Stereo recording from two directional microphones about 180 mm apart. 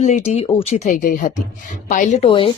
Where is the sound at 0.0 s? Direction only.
35° left (ahead or behind).